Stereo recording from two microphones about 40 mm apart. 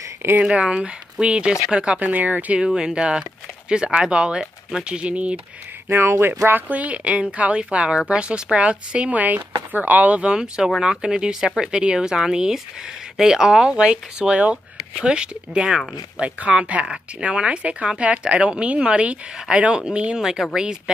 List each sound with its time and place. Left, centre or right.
0.2 s speech: right
0.6 s speech: right
2.0 s speech: right
2.7 s speech: centre
4.4 s speech: centre
4.8 s speech: right
5.9 s speech: right
6.7 s speech: right
10.3 s speech: centre
16.8 s speech: right
20.2 s speech: centre